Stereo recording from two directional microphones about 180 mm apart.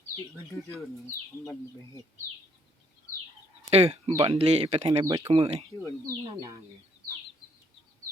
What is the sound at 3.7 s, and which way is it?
Speech, 35° right (ahead or behind).